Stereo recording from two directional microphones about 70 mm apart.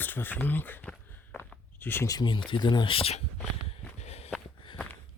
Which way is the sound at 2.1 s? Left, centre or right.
Left.